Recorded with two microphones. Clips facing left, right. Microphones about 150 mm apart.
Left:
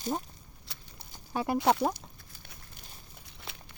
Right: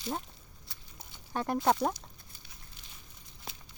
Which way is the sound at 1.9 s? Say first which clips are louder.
Left 2 dB; 55° left (ahead or behind).